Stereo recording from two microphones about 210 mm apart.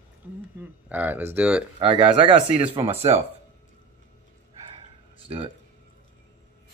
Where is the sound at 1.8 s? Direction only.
25° right (ahead or behind).